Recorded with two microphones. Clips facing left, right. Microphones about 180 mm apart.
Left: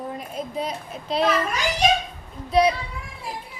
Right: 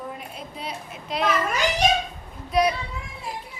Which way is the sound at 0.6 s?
35° left (ahead or behind).